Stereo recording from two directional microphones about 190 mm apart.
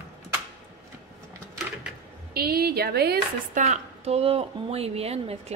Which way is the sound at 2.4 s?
55° right (ahead or behind).